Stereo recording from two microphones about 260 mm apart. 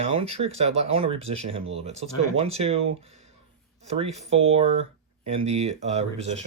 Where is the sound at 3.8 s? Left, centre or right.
Right.